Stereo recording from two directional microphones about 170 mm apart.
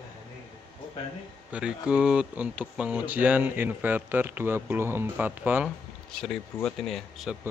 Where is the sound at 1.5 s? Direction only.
5° right (ahead or behind).